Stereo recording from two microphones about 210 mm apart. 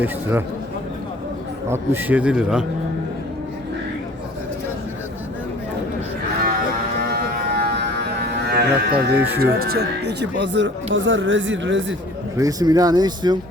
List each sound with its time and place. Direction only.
0.0 s speech: 10° right (ahead or behind)
1.7 s speech: 10° right (ahead or behind)
7.1 s music: 45° right (ahead or behind)
8.4 s speech: 50° right (ahead or behind)
9.1 s speech: 10° right (ahead or behind)
9.4 s speech: 45° right (ahead or behind); by 11.9 s 60° right (ahead or behind)
12.4 s speech: 15° right (ahead or behind)